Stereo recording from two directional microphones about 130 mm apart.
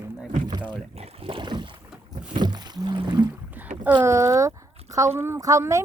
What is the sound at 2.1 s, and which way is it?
Rowboat, 35° right (ahead or behind).